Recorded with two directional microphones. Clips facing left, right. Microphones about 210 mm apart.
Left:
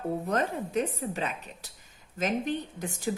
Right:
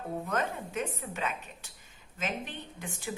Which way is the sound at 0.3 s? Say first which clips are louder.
Left 4 dB; 35° left (ahead or behind).